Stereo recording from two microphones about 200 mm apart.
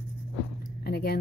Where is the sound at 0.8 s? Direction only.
50° left (ahead or behind).